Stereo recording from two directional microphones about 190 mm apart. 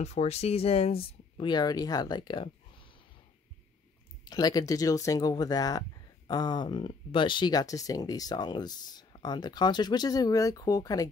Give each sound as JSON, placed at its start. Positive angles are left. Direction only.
{"t": 0.0, "sound": "speech", "side_deg": 35}
{"t": 4.2, "sound": "speech", "side_deg": 20}